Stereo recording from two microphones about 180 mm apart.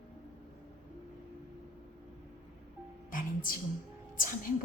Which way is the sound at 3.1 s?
50° left (ahead or behind).